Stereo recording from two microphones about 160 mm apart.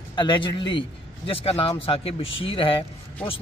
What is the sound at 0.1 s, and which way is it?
Speech, 30° left (ahead or behind).